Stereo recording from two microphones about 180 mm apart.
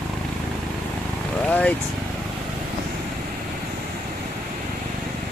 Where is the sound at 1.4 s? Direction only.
10° left (ahead or behind).